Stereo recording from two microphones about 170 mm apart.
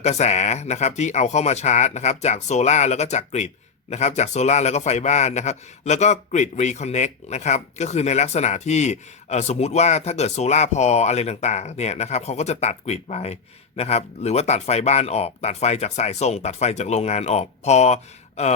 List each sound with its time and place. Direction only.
0.0 s speech: 40° left (ahead or behind)